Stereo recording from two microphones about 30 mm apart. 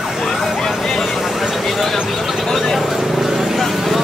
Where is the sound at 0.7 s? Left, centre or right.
Centre.